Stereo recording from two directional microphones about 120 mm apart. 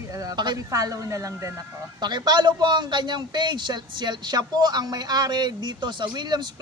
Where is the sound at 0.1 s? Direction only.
30° right (ahead or behind).